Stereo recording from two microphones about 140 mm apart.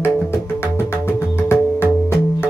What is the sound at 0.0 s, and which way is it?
Music, 15° left (ahead or behind).